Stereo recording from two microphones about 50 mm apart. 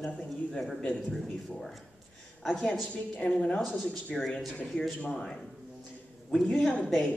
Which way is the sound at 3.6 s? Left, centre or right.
Centre.